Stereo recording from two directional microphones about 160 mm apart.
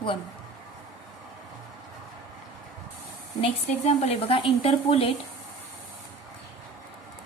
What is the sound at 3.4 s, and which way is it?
Speech, 40° left (ahead or behind).